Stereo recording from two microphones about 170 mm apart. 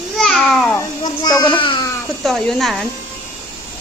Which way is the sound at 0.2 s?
Centre (ahead or behind).